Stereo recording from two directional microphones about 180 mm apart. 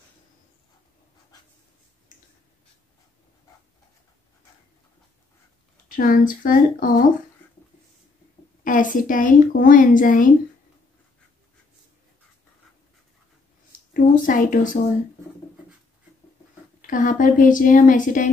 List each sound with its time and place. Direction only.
5.9 s a woman's voice: 50° left (ahead or behind)
8.6 s a woman's voice: 45° left (ahead or behind)
13.7 s a sound: 50° left (ahead or behind)
16.8 s a woman's voice: 45° left (ahead or behind)